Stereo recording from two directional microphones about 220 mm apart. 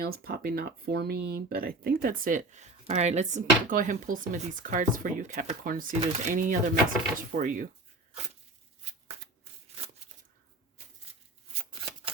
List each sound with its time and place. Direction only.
0.0 s speech: 45° right (ahead or behind)